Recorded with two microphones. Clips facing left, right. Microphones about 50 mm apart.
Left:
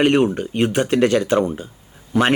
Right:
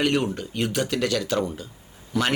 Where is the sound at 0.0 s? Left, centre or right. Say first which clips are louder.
Left 7 dB; left.